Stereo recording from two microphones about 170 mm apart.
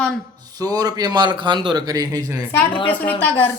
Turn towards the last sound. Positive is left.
turn(degrees=10)  # may be behind; listen again after turning